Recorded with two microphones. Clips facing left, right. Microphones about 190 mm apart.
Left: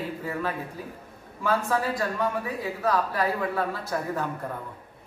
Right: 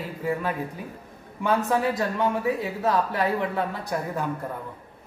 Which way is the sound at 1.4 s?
20° right (ahead or behind).